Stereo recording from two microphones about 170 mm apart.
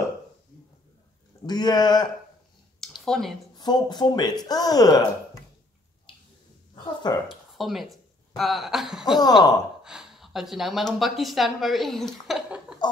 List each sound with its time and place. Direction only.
1.4 s speech: 25° left (ahead or behind)
3.0 s speech: centre (ahead or behind)
3.5 s speech: 25° left (ahead or behind)
6.7 s a sound: 25° left (ahead or behind)
7.2 s speech: centre (ahead or behind)
9.2 s speech: 25° left (ahead or behind)
9.8 s speech: 5° right (ahead or behind)
12.3 s a sound: 5° right (ahead or behind)